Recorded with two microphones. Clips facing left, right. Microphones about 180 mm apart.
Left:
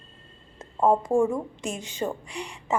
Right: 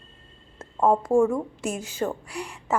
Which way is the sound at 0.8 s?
15° left (ahead or behind).